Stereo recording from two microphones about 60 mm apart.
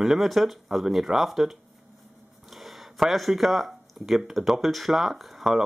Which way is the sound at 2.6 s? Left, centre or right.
Centre.